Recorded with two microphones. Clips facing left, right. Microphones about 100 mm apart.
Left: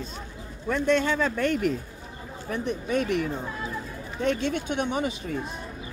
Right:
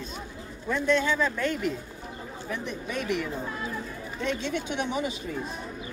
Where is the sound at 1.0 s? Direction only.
50° left (ahead or behind).